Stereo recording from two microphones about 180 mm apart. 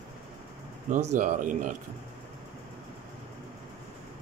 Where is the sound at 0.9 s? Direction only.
45° right (ahead or behind).